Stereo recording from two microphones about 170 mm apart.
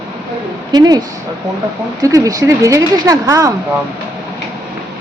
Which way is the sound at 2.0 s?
20° right (ahead or behind).